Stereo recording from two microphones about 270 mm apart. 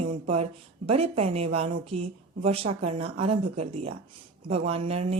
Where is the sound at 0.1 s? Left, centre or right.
Right.